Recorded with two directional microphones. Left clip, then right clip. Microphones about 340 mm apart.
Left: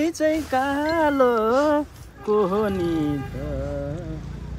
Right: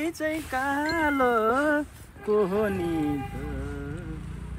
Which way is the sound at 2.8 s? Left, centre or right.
Left.